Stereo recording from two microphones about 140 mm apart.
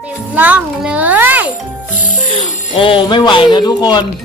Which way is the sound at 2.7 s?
40° left (ahead or behind).